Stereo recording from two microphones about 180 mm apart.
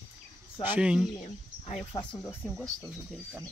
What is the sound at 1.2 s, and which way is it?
Speech, 35° left (ahead or behind).